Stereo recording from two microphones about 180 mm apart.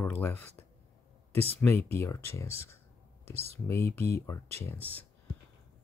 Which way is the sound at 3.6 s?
15° left (ahead or behind).